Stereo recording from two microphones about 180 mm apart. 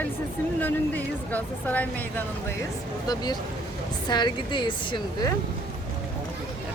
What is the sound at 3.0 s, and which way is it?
A woman's voice, 25° left (ahead or behind).